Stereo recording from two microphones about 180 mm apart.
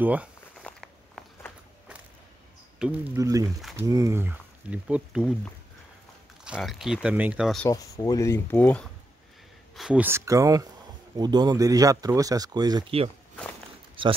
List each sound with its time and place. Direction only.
0.0 s walk: 10° right (ahead or behind)
2.8 s speech: 10° right (ahead or behind)
6.4 s speech: 5° right (ahead or behind)
7.6 s speech: 20° left (ahead or behind)
9.8 s speech: 5° right (ahead or behind); by 13.1 s 30° right (ahead or behind)